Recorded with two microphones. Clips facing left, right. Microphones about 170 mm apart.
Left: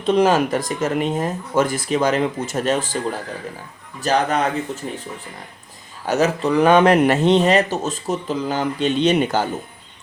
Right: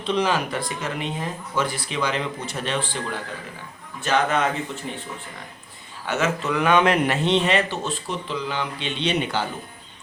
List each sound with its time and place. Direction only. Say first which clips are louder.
0.0 s speech: left 7 dB; 45° left (ahead or behind)
6.1 s speech: left 6 dB; 35° left (ahead or behind)